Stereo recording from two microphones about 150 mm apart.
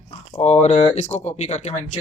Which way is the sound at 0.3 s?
45° left (ahead or behind).